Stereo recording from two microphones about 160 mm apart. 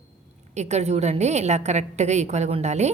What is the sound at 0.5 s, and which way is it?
A woman's voice, 45° right (ahead or behind).